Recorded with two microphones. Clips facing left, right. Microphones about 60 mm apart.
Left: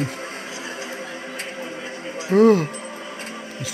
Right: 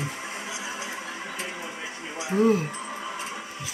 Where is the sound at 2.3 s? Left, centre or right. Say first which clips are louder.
Left 7 dB; left.